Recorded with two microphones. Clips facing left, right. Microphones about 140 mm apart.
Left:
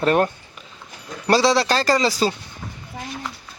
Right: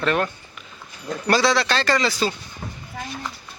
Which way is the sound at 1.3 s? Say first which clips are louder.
Left 3 dB; 35° left (ahead or behind).